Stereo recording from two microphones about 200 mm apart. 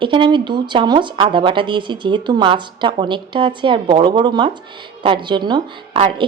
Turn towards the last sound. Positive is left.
turn(degrees=-25)  # may be behind; listen again after turning